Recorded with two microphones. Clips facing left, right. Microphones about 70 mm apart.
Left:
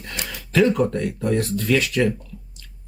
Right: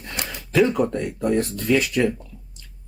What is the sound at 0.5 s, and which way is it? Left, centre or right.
Speech, centre.